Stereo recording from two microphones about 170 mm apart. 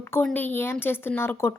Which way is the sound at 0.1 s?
10° left (ahead or behind).